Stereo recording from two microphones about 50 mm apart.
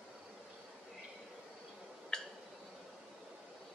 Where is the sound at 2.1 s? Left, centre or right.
Centre.